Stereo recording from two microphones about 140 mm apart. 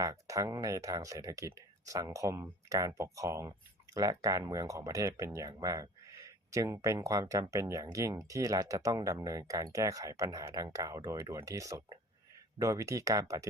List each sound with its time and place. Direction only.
0.0 s speech: 25° right (ahead or behind)